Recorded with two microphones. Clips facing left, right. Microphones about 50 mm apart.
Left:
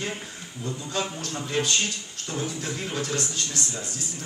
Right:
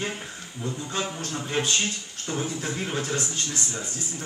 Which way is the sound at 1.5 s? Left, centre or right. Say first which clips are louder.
Even; right.